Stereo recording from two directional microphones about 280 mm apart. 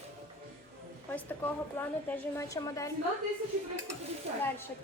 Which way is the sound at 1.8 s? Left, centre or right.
Centre.